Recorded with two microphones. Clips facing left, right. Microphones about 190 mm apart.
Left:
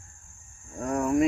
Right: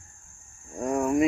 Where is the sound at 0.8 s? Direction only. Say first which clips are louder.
Right 1 dB; 10° right (ahead or behind).